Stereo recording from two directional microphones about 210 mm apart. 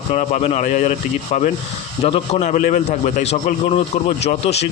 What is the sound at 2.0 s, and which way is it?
A man's voice, 25° left (ahead or behind).